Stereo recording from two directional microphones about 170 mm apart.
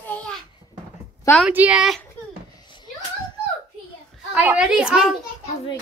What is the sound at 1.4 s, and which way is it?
Speech, 5° right (ahead or behind).